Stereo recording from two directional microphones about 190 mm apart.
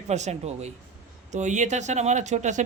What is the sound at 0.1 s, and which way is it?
Speech, 35° right (ahead or behind).